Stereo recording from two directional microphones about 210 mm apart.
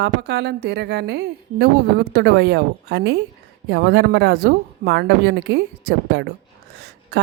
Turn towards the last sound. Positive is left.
turn(degrees=-50)  # may be behind; listen again after turning